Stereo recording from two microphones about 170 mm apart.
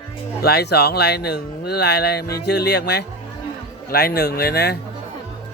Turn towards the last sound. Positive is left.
turn(degrees=70)  # may be behind; listen again after turning